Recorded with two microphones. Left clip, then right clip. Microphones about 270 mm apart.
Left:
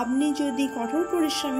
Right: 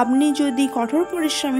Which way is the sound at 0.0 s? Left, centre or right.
Right.